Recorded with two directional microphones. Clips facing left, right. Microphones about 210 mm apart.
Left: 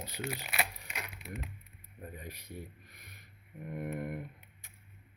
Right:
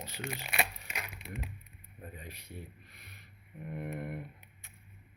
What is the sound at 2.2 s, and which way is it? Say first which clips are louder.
Speech: left 2 dB; 40° left (ahead or behind).